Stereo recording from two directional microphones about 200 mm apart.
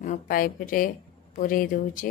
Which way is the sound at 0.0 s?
40° left (ahead or behind).